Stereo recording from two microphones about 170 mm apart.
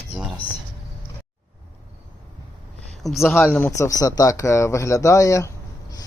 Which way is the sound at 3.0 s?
Centre (ahead or behind).